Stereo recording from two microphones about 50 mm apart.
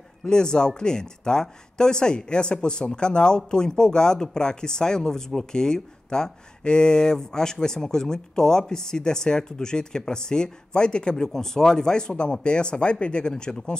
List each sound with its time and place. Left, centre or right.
0.2 s speech: centre